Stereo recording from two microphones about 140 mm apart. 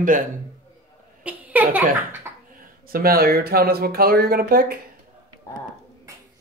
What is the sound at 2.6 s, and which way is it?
Speech, 90° right.